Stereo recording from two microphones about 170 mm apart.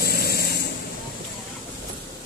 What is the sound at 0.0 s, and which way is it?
Vehicle, 65° left (ahead or behind).